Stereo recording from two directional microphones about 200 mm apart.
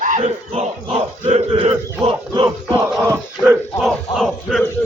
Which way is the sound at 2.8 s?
10° right (ahead or behind).